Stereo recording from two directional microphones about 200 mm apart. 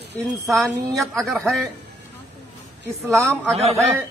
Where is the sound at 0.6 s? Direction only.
Centre (ahead or behind).